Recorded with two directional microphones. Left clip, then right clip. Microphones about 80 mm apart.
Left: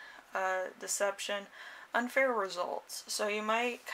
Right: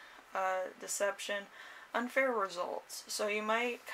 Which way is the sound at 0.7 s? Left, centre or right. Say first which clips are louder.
Left 2 dB; left.